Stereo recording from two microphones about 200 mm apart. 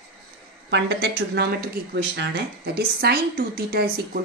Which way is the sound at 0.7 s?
60° right (ahead or behind).